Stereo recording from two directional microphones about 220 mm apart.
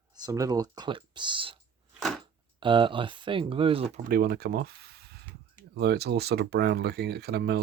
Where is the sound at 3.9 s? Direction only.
40° right (ahead or behind).